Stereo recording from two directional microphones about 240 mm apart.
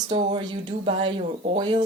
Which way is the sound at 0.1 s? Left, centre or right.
Right.